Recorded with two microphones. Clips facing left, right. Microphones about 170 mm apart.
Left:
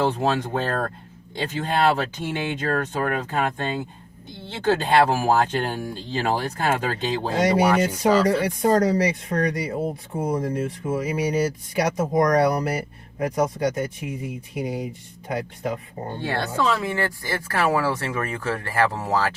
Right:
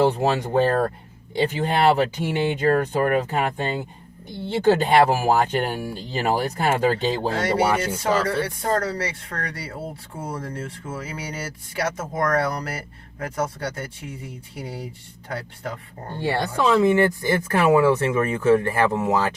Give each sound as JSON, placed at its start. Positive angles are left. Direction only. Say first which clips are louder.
{"t": 0.0, "sound": "speech", "louder": "right 2 dB", "side_deg": -10}
{"t": 7.3, "sound": "speech", "louder": "left 6 dB", "side_deg": 15}
{"t": 16.2, "sound": "speech", "louder": "right 2 dB", "side_deg": -10}